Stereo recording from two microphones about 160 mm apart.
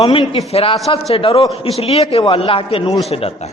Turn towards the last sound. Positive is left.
turn(degrees=40)  # may be behind; listen again after turning